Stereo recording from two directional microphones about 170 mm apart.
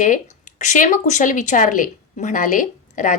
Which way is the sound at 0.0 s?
50° left (ahead or behind).